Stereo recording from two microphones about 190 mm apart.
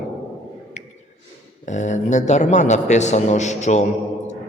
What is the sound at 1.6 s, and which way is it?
A man's voice, 40° left (ahead or behind).